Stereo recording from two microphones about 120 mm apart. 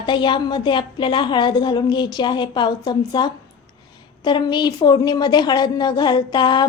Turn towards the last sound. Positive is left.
turn(degrees=40)  # may be behind; listen again after turning